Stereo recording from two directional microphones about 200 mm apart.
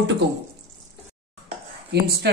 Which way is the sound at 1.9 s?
55° right (ahead or behind).